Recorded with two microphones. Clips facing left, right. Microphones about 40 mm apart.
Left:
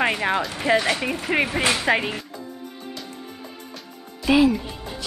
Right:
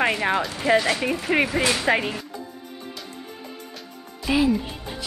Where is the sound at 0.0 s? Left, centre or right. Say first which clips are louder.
Even; left.